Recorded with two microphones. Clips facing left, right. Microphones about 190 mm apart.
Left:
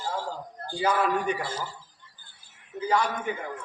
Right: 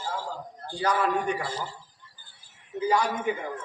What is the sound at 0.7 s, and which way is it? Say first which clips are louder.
Speech: left 1 dB; 5° left (ahead or behind).